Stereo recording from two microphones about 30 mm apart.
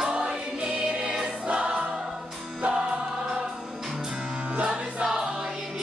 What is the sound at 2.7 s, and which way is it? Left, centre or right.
Music, right.